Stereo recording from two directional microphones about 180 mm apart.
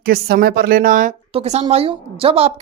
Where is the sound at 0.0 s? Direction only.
55° right (ahead or behind).